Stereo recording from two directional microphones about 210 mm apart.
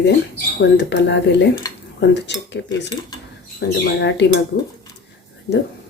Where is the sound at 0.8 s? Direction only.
55° left (ahead or behind).